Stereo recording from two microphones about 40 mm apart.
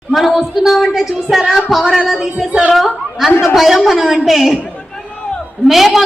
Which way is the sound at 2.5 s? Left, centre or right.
Right.